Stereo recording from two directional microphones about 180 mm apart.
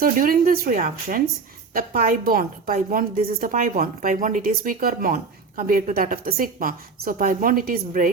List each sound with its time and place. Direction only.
0.0 s a woman's voice: 50° right (ahead or behind)